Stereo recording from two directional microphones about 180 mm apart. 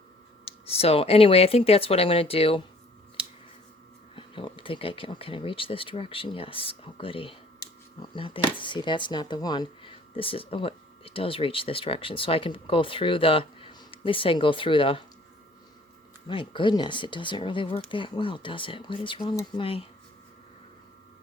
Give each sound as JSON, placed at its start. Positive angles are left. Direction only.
{"t": 0.4, "sound": "speech", "side_deg": 35}
{"t": 4.1, "sound": "speech", "side_deg": 30}
{"t": 16.2, "sound": "speech", "side_deg": 30}